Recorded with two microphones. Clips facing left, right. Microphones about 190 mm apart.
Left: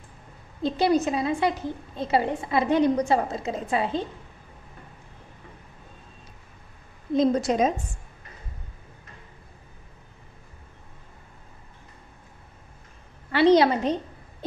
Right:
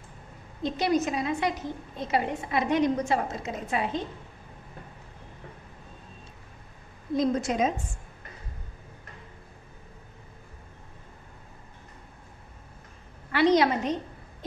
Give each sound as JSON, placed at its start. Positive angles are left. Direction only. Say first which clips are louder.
{"t": 0.6, "sound": "a woman's voice", "louder": "left 4 dB", "side_deg": 30}
{"t": 7.2, "sound": "a woman's voice", "louder": "left 4 dB", "side_deg": 35}
{"t": 13.3, "sound": "a sound", "louder": "left 4 dB", "side_deg": 30}